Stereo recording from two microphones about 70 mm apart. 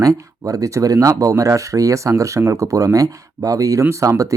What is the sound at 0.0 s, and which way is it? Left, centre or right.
Speech, right.